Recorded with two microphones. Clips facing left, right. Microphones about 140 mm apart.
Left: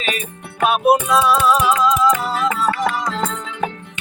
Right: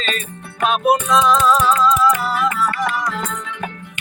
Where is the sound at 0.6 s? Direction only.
5° left (ahead or behind).